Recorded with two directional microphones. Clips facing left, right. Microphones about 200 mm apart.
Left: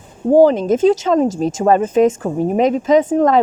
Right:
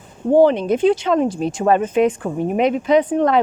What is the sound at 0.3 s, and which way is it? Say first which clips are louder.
Speech: left 3 dB; 40° left (ahead or behind).